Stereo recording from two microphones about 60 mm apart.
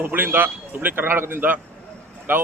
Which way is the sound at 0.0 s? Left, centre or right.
Right.